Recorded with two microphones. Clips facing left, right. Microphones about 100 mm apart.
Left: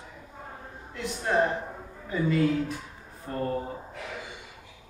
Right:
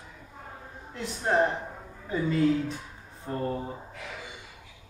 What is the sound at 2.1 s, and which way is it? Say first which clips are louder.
A woman's voice: even; 30° right (ahead or behind).